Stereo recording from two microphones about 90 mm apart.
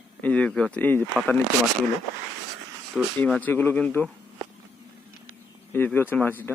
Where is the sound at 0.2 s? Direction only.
15° left (ahead or behind).